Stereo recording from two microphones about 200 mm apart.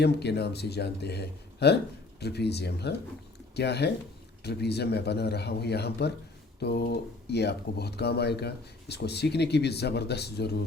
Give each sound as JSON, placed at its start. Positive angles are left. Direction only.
{"t": 0.0, "sound": "speech", "side_deg": 55}